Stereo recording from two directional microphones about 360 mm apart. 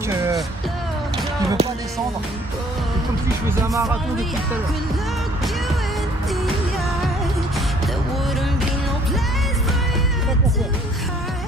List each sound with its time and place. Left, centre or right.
1.6 s music: centre
3.4 s music: centre